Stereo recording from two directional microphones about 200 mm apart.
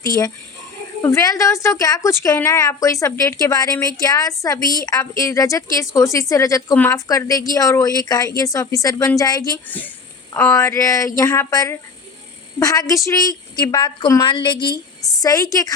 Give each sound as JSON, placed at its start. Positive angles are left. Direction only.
{"t": 1.0, "sound": "a woman's voice", "side_deg": 15}